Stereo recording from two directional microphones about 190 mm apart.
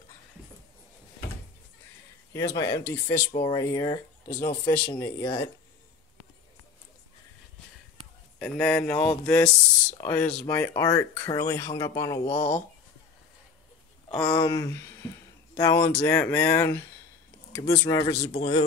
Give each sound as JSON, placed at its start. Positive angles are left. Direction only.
{"t": 2.3, "sound": "speech", "side_deg": 20}
{"t": 8.4, "sound": "speech", "side_deg": 5}
{"t": 12.3, "sound": "speech", "side_deg": 30}
{"t": 14.0, "sound": "speech", "side_deg": 15}
{"t": 18.3, "sound": "speech", "side_deg": 30}